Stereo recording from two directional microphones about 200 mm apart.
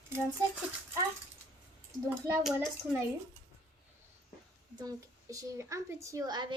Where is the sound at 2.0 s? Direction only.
15° right (ahead or behind).